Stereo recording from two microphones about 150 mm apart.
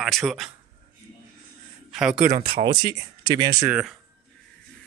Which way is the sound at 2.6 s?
25° right (ahead or behind).